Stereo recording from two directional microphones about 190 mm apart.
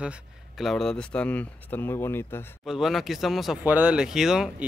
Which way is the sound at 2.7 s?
Centre (ahead or behind).